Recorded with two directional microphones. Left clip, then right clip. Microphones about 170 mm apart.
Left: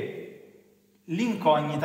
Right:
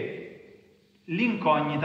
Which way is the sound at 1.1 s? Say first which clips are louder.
Left 1 dB; 45° left (ahead or behind).